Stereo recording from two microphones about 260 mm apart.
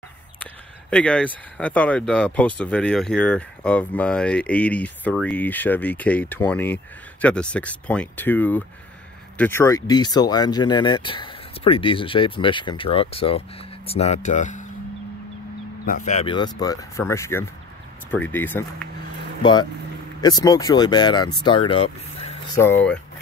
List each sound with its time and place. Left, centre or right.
0.4 s speech: centre; by 14.7 s left
15.8 s speech: left
22.6 s speech: centre